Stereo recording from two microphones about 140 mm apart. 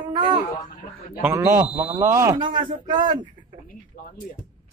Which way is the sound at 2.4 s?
35° right (ahead or behind).